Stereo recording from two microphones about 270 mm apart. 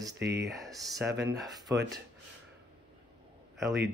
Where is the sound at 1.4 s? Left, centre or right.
Centre.